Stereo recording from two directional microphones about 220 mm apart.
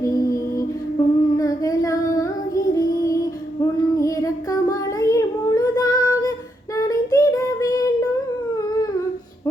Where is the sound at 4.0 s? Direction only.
15° left (ahead or behind).